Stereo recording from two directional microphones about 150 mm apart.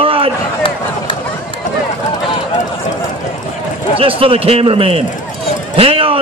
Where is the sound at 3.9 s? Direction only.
40° right (ahead or behind).